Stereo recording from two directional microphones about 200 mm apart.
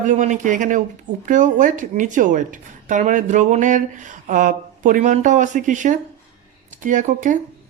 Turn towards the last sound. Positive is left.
turn(degrees=-40)  # may be behind; listen again after turning